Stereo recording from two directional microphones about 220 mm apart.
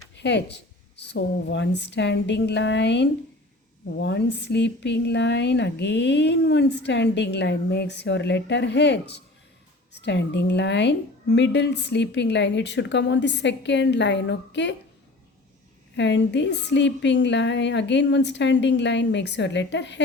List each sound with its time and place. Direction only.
0.2 s speech: 50° left (ahead or behind)
16.0 s speech: 55° left (ahead or behind)